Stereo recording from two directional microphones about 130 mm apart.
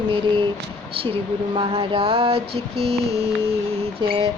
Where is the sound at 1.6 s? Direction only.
45° right (ahead or behind).